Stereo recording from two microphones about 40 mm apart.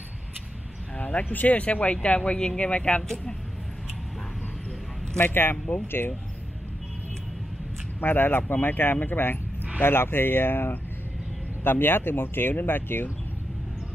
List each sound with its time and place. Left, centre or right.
0.9 s speech: left
5.2 s speech: left
8.0 s speech: left
9.8 s speech: left